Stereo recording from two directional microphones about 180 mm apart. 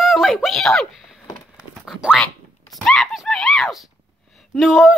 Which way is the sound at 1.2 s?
20° left (ahead or behind).